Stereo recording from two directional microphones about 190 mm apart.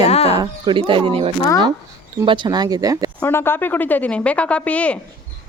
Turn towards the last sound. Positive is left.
turn(degrees=5)  # may be behind; listen again after turning